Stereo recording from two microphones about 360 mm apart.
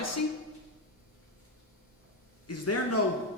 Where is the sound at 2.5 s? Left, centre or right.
Left.